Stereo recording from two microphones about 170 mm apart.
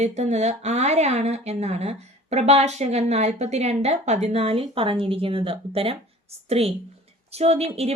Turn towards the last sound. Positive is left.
turn(degrees=-35)  # may be behind; listen again after turning